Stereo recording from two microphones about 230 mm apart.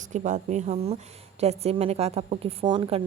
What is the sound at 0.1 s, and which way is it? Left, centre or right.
A woman's voice, right.